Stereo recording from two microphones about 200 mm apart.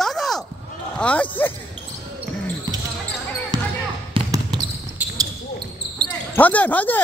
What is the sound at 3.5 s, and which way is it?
Basketball bounce, 20° right (ahead or behind).